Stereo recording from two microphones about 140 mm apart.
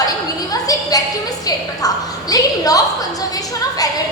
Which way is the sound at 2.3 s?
25° left (ahead or behind).